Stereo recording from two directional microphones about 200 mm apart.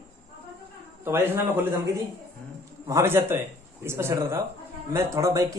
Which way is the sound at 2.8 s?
15° right (ahead or behind).